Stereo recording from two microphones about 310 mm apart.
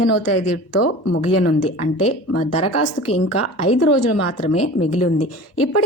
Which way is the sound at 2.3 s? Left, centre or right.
Left.